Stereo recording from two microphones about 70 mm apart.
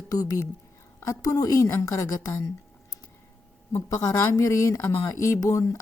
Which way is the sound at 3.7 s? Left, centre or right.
Left.